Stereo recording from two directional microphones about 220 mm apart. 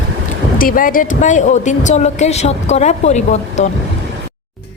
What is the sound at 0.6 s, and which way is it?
A woman's voice, 40° left (ahead or behind).